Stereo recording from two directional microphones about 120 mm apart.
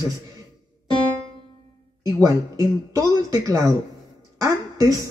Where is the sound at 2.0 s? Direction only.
30° right (ahead or behind).